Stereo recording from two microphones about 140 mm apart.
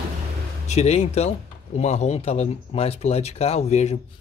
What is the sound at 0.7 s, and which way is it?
Speech, 50° left (ahead or behind).